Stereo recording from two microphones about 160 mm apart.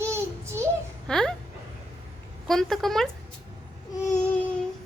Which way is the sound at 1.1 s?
5° left (ahead or behind).